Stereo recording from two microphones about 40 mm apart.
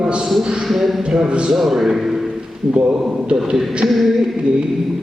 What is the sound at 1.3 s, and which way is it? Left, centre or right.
Speech, right.